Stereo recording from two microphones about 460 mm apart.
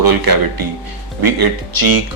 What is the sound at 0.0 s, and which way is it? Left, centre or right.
A man's voice, right.